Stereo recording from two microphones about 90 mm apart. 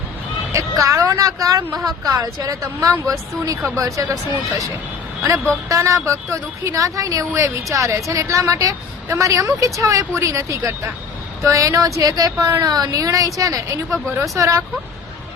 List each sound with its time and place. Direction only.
0.5 s a woman's voice: 35° right (ahead or behind)
5.6 s a woman's voice: 35° right (ahead or behind)